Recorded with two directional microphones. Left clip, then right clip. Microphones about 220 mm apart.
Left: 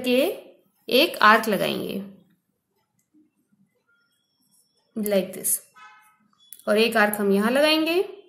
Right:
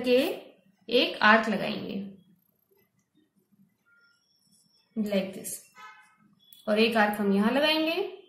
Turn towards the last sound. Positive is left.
turn(degrees=50)  # may be behind; listen again after turning